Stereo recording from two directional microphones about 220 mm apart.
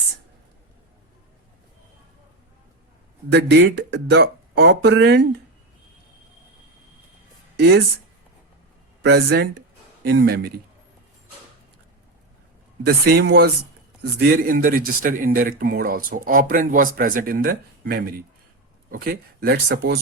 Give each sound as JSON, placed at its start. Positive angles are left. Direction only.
{"t": 3.3, "sound": "speech", "side_deg": -50}
{"t": 7.5, "sound": "a sound", "side_deg": -50}
{"t": 9.0, "sound": "speech", "side_deg": -50}
{"t": 12.8, "sound": "speech", "side_deg": -45}